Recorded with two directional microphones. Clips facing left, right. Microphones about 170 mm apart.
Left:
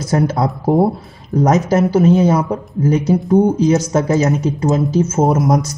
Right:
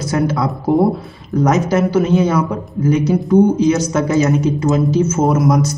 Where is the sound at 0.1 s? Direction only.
40° left (ahead or behind).